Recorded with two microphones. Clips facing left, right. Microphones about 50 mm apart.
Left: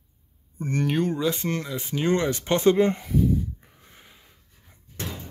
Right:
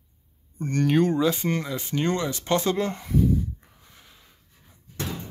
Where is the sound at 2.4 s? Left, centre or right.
Left.